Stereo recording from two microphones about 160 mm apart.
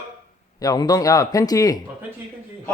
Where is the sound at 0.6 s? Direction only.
25° left (ahead or behind).